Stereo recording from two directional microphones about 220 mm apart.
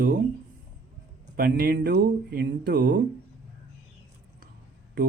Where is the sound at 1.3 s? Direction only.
45° right (ahead or behind).